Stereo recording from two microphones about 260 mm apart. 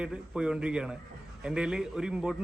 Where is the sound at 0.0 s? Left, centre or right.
Centre.